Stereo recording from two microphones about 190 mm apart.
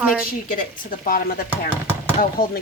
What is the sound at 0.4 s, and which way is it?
Speech, 45° left (ahead or behind).